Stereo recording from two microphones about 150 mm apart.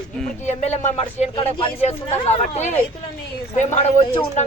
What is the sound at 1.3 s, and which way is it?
Speech, 35° left (ahead or behind).